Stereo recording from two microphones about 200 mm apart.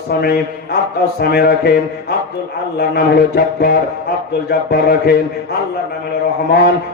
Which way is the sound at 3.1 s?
50° left (ahead or behind).